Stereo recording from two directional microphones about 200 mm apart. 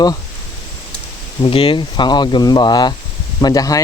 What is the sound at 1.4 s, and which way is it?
Speech, 25° left (ahead or behind).